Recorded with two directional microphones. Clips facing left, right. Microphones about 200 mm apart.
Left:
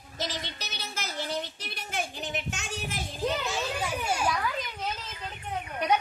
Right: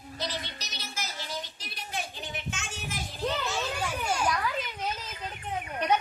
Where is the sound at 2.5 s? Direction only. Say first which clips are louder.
Left 3 dB; 40° left (ahead or behind).